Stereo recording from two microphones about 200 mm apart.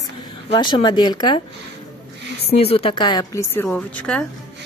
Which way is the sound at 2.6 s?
30° left (ahead or behind).